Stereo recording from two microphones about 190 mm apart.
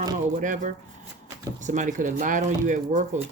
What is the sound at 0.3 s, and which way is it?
Speech, 40° right (ahead or behind).